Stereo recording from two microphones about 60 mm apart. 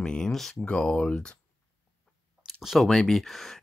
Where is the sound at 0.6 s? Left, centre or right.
Centre.